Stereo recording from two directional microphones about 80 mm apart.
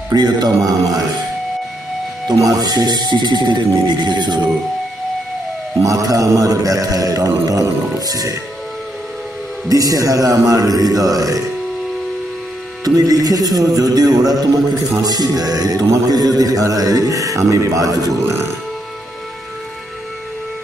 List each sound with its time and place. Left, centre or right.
0.1 s speech: right
2.3 s speech: right
2.6 s speech: right
5.8 s music: right
9.7 s music: right
12.8 s music: right